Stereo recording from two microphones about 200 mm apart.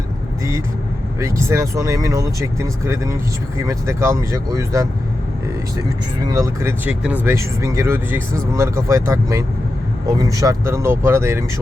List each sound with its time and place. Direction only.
1.2 s speech: 15° right (ahead or behind)
6.2 s speech: 15° right (ahead or behind)